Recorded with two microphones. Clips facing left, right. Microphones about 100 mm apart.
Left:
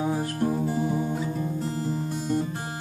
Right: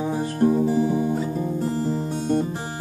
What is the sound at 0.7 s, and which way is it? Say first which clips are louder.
Music: right 5 dB; centre (ahead or behind).